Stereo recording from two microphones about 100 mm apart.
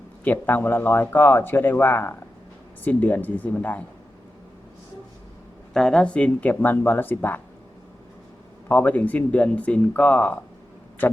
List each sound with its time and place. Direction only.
0.3 s speech: 20° left (ahead or behind)
5.7 s speech: 5° left (ahead or behind)
8.7 s speech: 15° left (ahead or behind)